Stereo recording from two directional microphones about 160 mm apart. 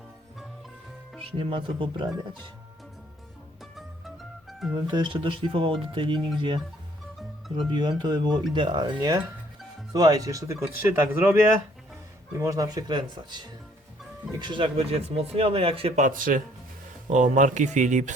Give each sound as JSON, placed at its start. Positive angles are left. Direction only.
{"t": 1.2, "sound": "speech", "side_deg": -35}
{"t": 3.6, "sound": "music", "side_deg": 0}
{"t": 4.7, "sound": "speech", "side_deg": -25}
{"t": 7.7, "sound": "speech", "side_deg": -25}
{"t": 12.4, "sound": "speech", "side_deg": -20}
{"t": 16.0, "sound": "speech", "side_deg": -55}